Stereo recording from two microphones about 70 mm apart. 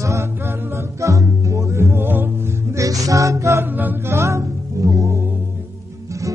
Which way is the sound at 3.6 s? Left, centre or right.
Right.